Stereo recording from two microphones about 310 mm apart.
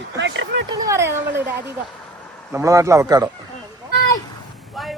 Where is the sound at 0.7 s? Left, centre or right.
Centre.